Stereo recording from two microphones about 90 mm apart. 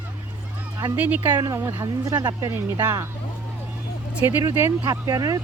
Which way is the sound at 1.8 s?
45° right (ahead or behind).